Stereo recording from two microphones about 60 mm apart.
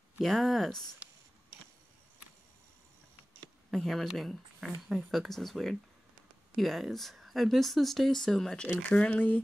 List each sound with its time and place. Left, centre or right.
0.2 s speech: centre
3.7 s speech: centre
8.8 s speech: left